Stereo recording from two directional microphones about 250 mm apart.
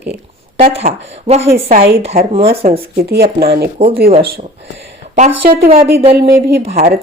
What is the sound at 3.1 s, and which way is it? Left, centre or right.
Speech, right.